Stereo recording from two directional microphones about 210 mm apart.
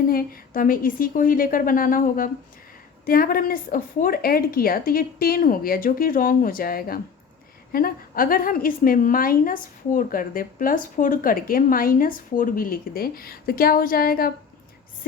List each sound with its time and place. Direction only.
0.1 s a woman's voice: 40° left (ahead or behind)